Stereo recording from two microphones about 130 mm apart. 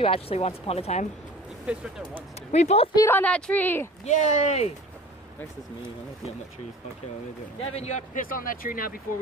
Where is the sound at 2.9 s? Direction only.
20° left (ahead or behind).